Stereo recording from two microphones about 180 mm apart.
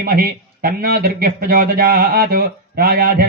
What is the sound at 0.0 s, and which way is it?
Speech, 55° right (ahead or behind).